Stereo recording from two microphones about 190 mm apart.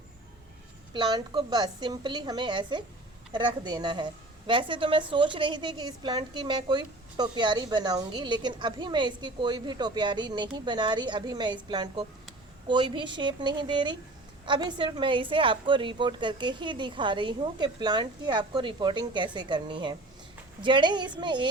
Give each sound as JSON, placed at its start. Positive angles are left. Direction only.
{"t": 0.9, "sound": "a woman's voice", "side_deg": -20}